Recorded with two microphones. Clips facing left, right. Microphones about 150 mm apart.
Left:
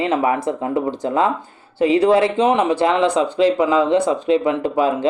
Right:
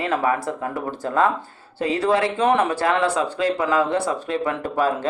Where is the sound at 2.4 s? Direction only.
15° left (ahead or behind).